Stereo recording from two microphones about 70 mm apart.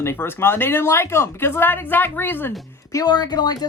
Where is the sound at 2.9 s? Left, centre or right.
Left.